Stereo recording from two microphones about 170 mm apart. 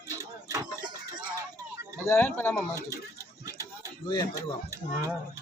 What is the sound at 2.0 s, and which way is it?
Speech, 10° left (ahead or behind).